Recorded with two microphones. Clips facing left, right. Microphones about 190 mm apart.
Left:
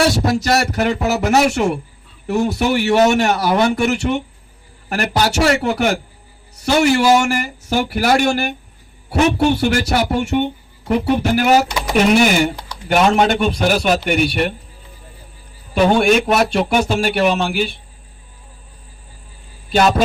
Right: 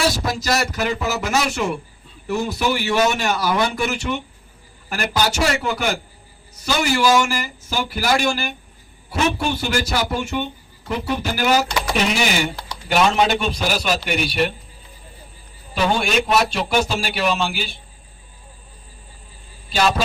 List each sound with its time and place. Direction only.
0.3 s a man's voice: 60° left (ahead or behind)
6.9 s speech: 25° left (ahead or behind)
7.2 s a man's voice: 65° left (ahead or behind)
11.5 s speech: 20° left (ahead or behind)
12.0 s a man's voice: 50° left (ahead or behind)
15.7 s a man's voice: 50° left (ahead or behind)